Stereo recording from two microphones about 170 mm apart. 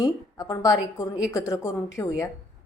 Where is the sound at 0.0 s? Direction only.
20° left (ahead or behind).